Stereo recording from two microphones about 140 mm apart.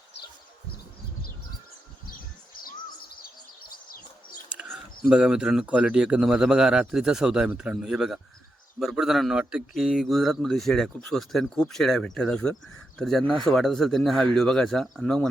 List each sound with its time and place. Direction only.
3.2 s bird: 90° left
4.4 s a sound: 10° right (ahead or behind)
4.7 s a man's voice: 5° right (ahead or behind)